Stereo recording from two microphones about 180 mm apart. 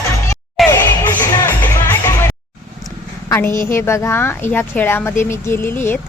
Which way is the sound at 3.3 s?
15° left (ahead or behind).